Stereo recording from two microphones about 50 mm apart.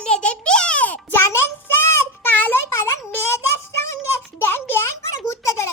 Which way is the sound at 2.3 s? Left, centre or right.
Left.